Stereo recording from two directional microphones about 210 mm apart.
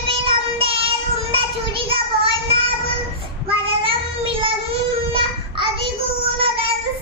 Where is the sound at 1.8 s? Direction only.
25° right (ahead or behind).